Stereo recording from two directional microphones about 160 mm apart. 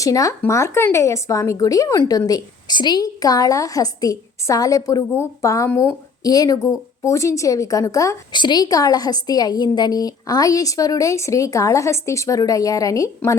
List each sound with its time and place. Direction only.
0.0 s speech: 20° left (ahead or behind)